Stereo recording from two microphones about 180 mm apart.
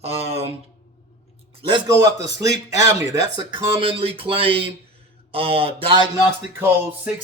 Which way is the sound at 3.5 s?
30° right (ahead or behind).